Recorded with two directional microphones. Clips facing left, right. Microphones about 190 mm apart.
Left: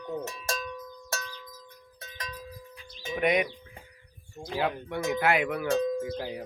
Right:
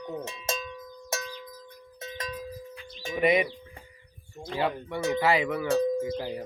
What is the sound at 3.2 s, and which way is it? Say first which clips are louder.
Speech: right 2 dB; centre (ahead or behind).